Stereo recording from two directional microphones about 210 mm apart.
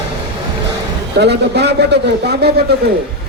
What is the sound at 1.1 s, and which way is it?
A man's voice, 50° right (ahead or behind).